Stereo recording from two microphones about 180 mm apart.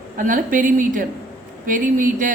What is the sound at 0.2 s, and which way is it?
A woman's voice, 45° right (ahead or behind).